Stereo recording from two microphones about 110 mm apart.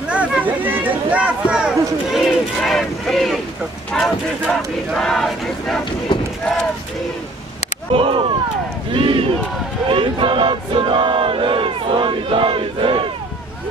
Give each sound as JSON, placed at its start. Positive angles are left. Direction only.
{"t": 0.1, "sound": "a sound", "side_deg": -15}
{"t": 2.1, "sound": "speech", "side_deg": 0}
{"t": 3.9, "sound": "a sound", "side_deg": 5}
{"t": 6.1, "sound": "run", "side_deg": 45}
{"t": 7.9, "sound": "speech", "side_deg": -55}
{"t": 8.9, "sound": "battle cry", "side_deg": -50}
{"t": 9.8, "sound": "crowd", "side_deg": -50}